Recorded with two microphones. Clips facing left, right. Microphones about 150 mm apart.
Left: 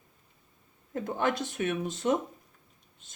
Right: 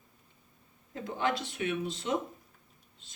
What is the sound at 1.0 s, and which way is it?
Speech, 50° left (ahead or behind).